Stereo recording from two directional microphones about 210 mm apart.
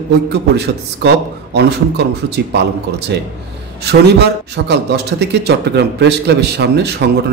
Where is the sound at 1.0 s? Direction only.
55° right (ahead or behind).